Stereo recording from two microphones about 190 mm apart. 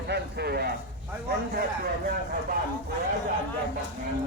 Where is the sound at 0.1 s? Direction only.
55° right (ahead or behind).